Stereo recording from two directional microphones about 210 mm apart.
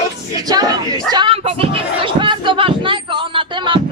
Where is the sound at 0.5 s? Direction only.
20° right (ahead or behind).